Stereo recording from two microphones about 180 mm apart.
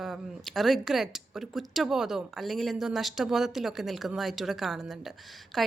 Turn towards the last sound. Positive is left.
turn(degrees=0)  # may be behind; listen again after turning